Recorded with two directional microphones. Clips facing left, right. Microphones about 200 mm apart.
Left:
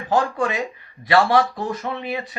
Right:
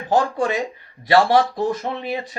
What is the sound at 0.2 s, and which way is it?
Speech, 35° right (ahead or behind).